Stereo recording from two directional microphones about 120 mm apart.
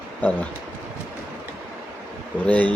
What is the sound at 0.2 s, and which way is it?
Speech, 15° left (ahead or behind).